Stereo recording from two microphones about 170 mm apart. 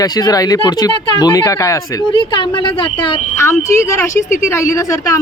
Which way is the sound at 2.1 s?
30° left (ahead or behind).